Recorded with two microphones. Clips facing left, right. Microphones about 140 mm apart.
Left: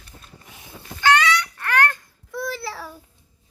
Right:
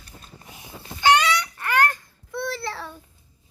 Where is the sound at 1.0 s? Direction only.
15° right (ahead or behind).